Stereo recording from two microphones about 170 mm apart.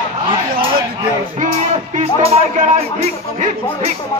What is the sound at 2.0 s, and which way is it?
Speech, 40° right (ahead or behind).